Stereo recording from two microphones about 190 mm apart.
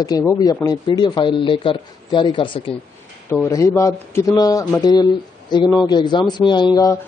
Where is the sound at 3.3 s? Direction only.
10° left (ahead or behind).